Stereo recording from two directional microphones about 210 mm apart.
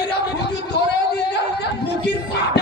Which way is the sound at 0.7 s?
50° left (ahead or behind).